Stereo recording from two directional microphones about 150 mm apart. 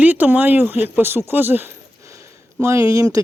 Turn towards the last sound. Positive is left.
turn(degrees=-20)  # may be behind; listen again after turning